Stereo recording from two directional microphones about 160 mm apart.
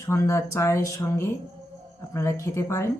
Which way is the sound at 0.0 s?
20° left (ahead or behind).